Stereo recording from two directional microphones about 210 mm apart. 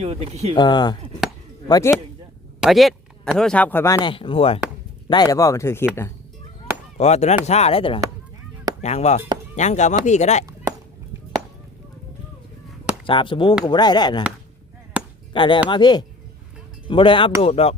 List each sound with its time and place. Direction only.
0.0 s speech: 30° right (ahead or behind)
0.5 s speech: 20° left (ahead or behind)
2.6 s speech: centre (ahead or behind)
6.9 s speech: 30° left (ahead or behind)
10.4 s chop: 15° right (ahead or behind)
13.1 s speech: 25° left (ahead or behind)
15.0 s chop: 5° right (ahead or behind)
15.3 s speech: 20° left (ahead or behind)